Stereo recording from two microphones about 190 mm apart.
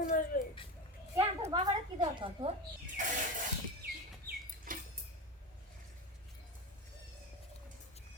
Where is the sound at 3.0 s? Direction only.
40° right (ahead or behind).